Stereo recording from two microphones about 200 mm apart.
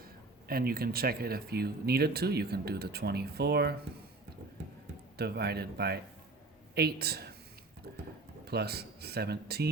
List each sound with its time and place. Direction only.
0.0 s speech: 50° right (ahead or behind)
5.1 s speech: 55° right (ahead or behind)